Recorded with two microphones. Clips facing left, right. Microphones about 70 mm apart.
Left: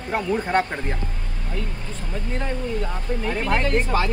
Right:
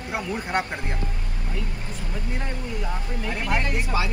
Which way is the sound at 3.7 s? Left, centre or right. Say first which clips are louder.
Left 5 dB; left.